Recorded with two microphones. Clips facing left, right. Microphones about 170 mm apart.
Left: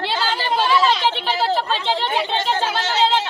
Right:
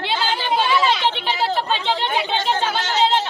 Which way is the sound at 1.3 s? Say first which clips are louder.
Left 1 dB; centre (ahead or behind).